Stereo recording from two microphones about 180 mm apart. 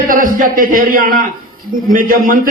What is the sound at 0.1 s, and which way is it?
A man's voice, 50° right (ahead or behind).